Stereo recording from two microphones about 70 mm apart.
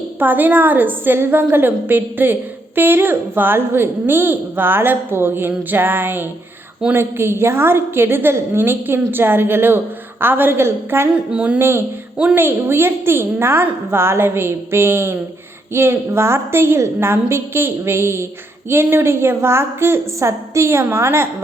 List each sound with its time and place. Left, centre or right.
0.2 s a woman's voice: right
11.1 s a woman's voice: centre
12.3 s a woman's voice: right